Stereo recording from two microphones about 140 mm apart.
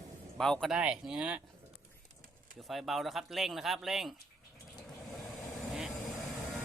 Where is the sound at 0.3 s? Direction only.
5° left (ahead or behind).